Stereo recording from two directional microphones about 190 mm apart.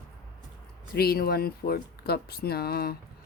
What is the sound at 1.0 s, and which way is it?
Speech, 55° left (ahead or behind).